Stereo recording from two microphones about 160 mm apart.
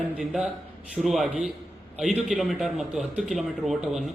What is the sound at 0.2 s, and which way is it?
Speech, 5° right (ahead or behind).